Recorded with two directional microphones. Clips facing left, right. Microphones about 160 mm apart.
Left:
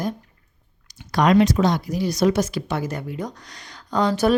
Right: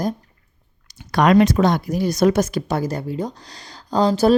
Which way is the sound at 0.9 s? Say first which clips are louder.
Right 2 dB; 60° right (ahead or behind).